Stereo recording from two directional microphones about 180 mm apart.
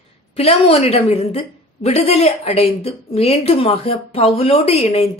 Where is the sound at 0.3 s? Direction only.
35° left (ahead or behind).